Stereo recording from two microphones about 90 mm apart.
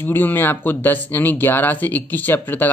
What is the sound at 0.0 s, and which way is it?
Speech, 25° left (ahead or behind).